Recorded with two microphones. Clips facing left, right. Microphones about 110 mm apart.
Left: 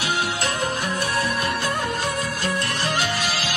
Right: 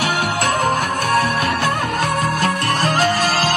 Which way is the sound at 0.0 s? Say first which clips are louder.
Right 5 dB; 55° right (ahead or behind).